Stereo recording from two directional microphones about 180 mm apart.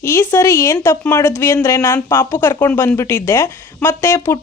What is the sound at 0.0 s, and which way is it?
Speech, 15° left (ahead or behind).